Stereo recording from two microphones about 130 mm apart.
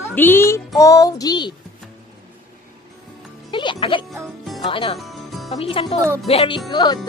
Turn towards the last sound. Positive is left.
turn(degrees=35)  # may be behind; listen again after turning